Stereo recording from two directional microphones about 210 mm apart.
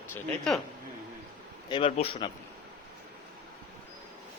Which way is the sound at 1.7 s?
25° left (ahead or behind).